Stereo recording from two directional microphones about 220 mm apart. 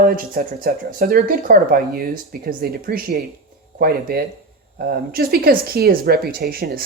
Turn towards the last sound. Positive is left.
turn(degrees=-45)  # may be behind; listen again after turning